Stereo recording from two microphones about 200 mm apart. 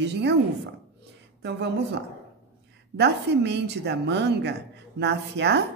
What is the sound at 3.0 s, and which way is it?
A woman's voice, 60° right (ahead or behind).